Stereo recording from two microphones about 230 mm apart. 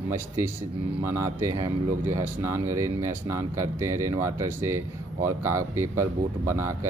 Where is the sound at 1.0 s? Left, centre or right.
Centre.